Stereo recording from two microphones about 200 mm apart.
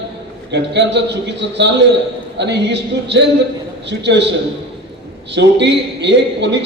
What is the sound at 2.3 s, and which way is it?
A man's voice, 60° right (ahead or behind).